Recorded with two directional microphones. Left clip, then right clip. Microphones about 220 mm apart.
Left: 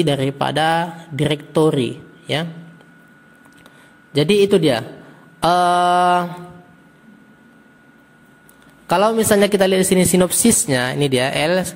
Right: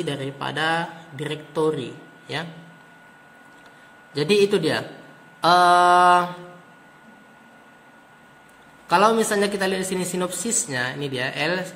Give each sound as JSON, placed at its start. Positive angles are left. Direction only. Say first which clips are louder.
{"t": 0.0, "sound": "a man's voice", "louder": "left 9 dB", "side_deg": 40}
{"t": 4.1, "sound": "a man's voice", "louder": "left 5 dB", "side_deg": 35}
{"t": 8.8, "sound": "a man's voice", "louder": "left 2 dB", "side_deg": 40}